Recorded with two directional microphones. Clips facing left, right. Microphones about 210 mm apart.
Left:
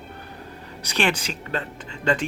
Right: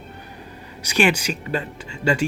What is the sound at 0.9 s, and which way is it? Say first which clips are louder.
Speech: right 4 dB; 10° right (ahead or behind).